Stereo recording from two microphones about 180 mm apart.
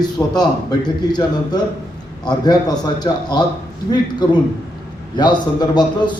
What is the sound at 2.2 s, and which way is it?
A man's voice, 20° left (ahead or behind).